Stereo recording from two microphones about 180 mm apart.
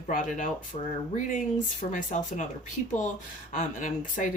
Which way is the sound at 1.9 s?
45° left (ahead or behind).